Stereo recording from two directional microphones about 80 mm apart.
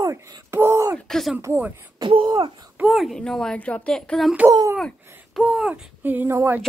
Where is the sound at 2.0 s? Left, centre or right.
Right.